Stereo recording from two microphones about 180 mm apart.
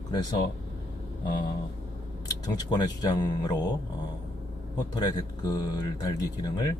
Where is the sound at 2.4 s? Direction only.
20° left (ahead or behind).